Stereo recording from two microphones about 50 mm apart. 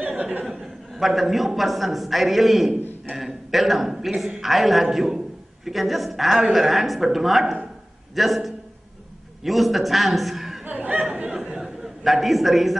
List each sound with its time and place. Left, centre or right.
0.0 s chuckle: right
0.5 s a man's voice: centre
10.6 s speech: right
11.5 s a sound: centre